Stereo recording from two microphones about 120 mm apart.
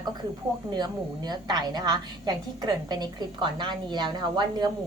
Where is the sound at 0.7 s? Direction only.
35° right (ahead or behind).